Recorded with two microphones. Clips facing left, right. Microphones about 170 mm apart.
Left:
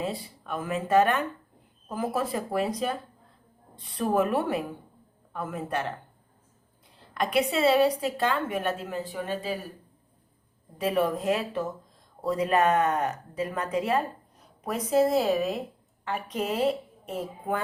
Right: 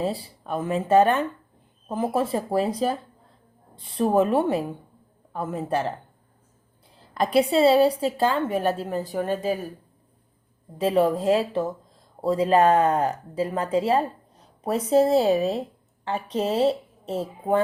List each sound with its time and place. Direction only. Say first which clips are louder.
0.0 s a woman's voice: right 5 dB; 30° right (ahead or behind)
6.9 s a sound: right 5 dB; 35° right (ahead or behind)
7.5 s a woman's voice: right 4 dB; 30° right (ahead or behind)
10.8 s a woman's voice: right 5 dB; 30° right (ahead or behind)